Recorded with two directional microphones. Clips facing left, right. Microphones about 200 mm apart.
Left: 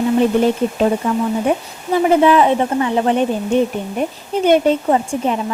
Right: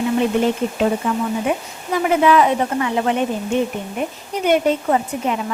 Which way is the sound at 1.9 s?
30° left (ahead or behind).